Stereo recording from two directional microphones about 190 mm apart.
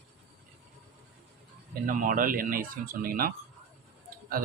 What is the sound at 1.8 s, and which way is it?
Speech, 45° right (ahead or behind).